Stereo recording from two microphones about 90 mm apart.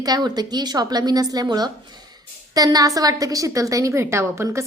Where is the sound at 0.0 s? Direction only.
50° right (ahead or behind).